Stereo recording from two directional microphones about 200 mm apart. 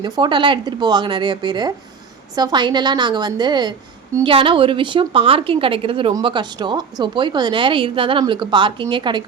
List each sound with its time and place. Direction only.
0.0 s a woman's voice: 20° right (ahead or behind)